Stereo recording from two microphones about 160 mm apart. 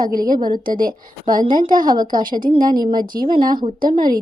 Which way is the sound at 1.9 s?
25° right (ahead or behind).